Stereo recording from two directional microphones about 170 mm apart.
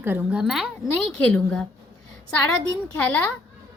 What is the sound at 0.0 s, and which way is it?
Speech, 10° right (ahead or behind).